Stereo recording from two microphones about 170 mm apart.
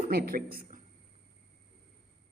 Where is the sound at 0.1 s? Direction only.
60° right (ahead or behind).